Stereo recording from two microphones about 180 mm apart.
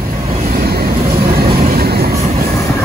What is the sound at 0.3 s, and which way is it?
Vehicle, 50° right (ahead or behind).